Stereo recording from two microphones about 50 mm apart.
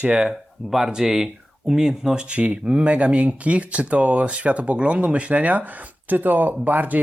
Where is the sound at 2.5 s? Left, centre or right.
Right.